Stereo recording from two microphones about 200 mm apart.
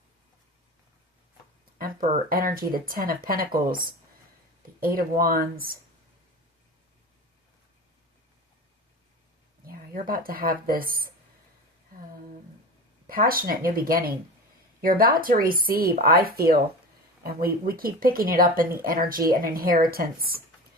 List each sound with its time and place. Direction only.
1.8 s speech: 45° right (ahead or behind)
9.6 s speech: 45° right (ahead or behind)
13.1 s speech: 45° right (ahead or behind)